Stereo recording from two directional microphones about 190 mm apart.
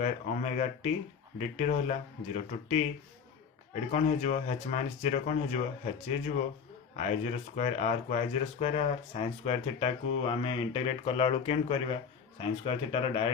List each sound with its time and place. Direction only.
0.0 s speech: 35° left (ahead or behind)
3.9 s speech: 40° left (ahead or behind)